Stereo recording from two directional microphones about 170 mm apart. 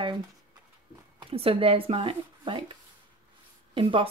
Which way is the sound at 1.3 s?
35° right (ahead or behind).